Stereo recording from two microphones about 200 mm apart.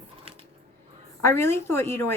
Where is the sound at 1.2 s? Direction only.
10° left (ahead or behind).